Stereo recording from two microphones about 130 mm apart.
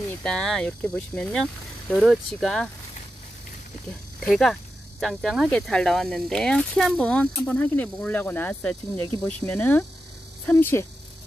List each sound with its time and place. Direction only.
0.2 s speech: 5° left (ahead or behind)
4.2 s speech: centre (ahead or behind); by 10.9 s 20° left (ahead or behind)